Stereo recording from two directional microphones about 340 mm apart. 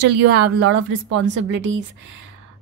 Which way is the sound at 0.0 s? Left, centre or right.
Right.